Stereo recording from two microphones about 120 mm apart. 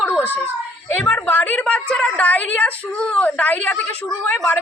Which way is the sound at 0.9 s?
15° left (ahead or behind).